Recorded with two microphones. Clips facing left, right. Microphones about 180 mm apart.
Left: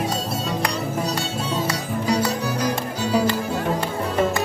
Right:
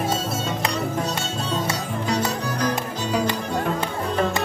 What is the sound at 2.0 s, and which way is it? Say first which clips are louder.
Music: left 3 dB; 5° left (ahead or behind).